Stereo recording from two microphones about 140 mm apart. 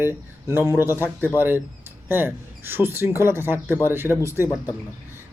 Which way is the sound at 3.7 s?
15° left (ahead or behind).